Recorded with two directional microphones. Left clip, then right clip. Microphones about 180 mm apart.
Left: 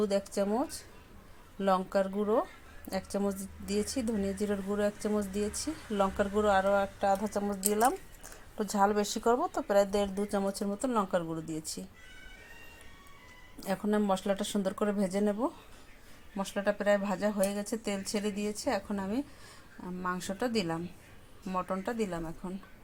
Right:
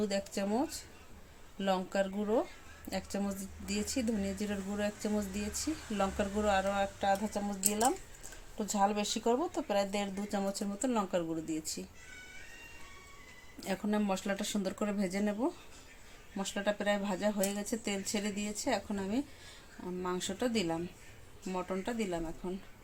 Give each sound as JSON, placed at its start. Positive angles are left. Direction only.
{"t": 0.1, "sound": "speech", "side_deg": 10}
{"t": 13.6, "sound": "speech", "side_deg": 10}
{"t": 19.8, "sound": "speech", "side_deg": 15}